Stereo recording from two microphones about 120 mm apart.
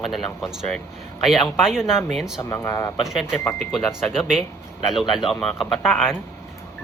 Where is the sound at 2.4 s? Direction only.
20° left (ahead or behind).